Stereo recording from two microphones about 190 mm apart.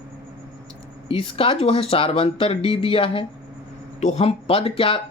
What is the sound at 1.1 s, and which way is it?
Speech, 30° left (ahead or behind).